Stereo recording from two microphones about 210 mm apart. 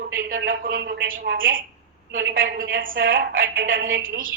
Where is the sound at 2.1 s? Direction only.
55° right (ahead or behind).